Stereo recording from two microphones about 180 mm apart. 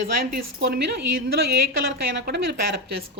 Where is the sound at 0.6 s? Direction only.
70° right (ahead or behind).